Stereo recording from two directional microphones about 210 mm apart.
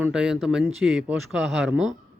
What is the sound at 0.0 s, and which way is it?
Speech, 5° right (ahead or behind).